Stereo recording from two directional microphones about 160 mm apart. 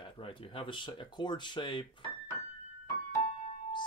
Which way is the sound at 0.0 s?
35° left (ahead or behind).